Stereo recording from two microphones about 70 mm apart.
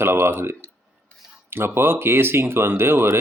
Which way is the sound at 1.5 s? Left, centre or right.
Right.